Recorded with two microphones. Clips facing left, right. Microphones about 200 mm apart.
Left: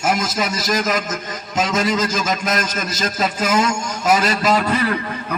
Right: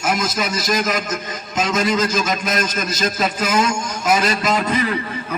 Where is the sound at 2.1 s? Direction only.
40° left (ahead or behind).